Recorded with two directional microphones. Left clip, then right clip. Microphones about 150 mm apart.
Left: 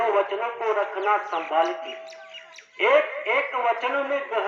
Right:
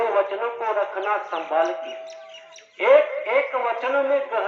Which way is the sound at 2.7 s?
35° right (ahead or behind).